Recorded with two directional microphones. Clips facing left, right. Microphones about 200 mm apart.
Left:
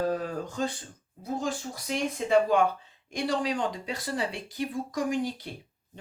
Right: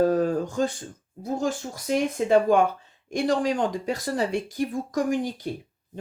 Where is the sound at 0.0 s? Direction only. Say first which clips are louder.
Right 8 dB; 45° right (ahead or behind).